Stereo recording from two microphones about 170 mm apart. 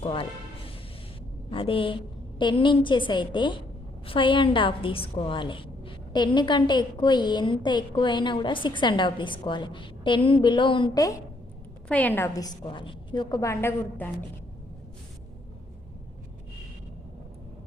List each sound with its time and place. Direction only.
0.0 s a woman's voice: 30° left (ahead or behind)
11.9 s a woman's voice: 10° left (ahead or behind)